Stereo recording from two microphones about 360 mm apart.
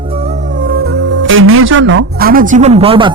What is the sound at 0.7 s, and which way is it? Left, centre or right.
Music, right.